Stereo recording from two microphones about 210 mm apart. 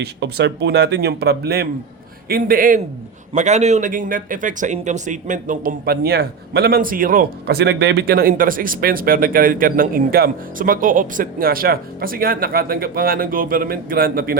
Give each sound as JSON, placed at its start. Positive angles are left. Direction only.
{"t": 0.0, "sound": "a man's voice", "side_deg": -55}